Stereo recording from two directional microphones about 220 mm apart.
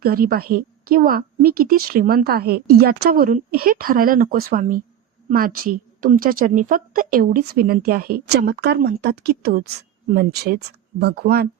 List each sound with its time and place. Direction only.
0.0 s a woman's voice: 40° right (ahead or behind)